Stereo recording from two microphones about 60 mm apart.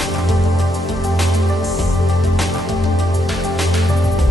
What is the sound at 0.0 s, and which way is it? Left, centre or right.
Music, centre.